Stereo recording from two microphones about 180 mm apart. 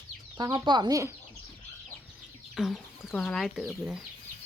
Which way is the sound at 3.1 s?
Centre (ahead or behind).